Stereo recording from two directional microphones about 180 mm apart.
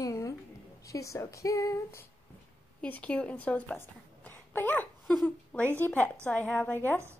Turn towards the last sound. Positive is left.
turn(degrees=10)  # may be behind; listen again after turning